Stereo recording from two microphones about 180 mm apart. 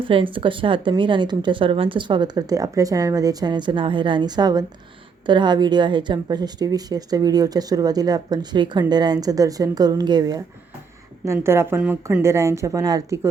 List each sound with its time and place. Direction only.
0.0 s speech: 30° right (ahead or behind)